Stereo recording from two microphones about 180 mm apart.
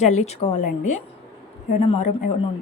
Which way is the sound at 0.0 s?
40° left (ahead or behind).